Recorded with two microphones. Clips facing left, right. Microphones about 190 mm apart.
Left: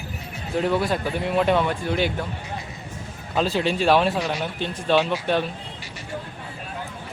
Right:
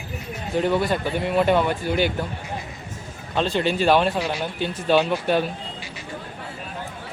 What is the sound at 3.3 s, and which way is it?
A man's voice, 5° left (ahead or behind).